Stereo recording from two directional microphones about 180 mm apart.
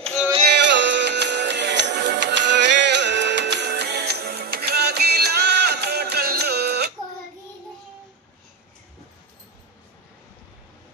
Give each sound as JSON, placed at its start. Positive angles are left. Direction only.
{"t": 0.0, "sound": "music", "side_deg": 0}
{"t": 0.6, "sound": "music", "side_deg": -80}